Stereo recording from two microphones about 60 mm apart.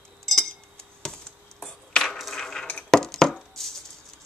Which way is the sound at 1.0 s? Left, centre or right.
Centre.